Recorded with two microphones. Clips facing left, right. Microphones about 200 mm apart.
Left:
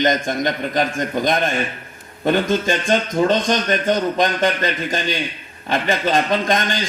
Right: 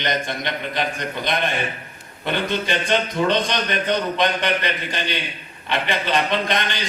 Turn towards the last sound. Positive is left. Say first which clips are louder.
# left 4 dB
turn(degrees=45)  # may be behind; listen again after turning